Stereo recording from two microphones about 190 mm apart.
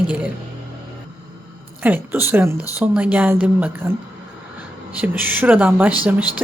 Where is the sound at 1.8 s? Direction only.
10° right (ahead or behind).